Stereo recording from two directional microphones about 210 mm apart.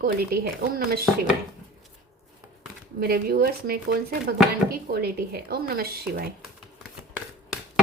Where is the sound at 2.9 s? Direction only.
45° right (ahead or behind).